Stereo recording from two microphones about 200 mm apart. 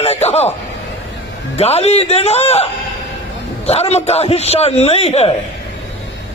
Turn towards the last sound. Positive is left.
turn(degrees=30)  # may be behind; listen again after turning